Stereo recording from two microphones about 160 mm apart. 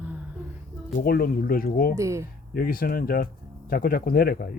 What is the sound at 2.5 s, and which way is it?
Speech, 65° left (ahead or behind).